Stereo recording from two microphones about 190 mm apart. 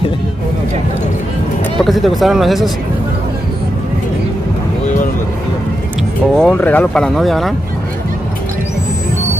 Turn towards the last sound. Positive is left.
turn(degrees=0)  # may be behind; listen again after turning